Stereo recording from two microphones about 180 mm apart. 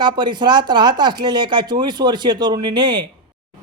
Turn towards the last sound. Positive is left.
turn(degrees=-25)  # may be behind; listen again after turning